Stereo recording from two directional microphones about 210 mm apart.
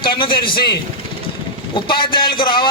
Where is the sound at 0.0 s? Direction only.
25° left (ahead or behind).